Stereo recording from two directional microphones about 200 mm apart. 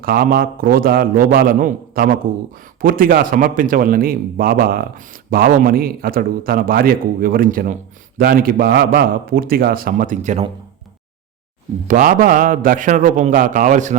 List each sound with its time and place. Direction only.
0.0 s a man's voice: 50° right (ahead or behind)
11.9 s a man's voice: 40° right (ahead or behind)